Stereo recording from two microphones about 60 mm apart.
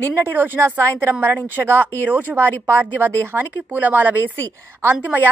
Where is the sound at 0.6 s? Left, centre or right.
Right.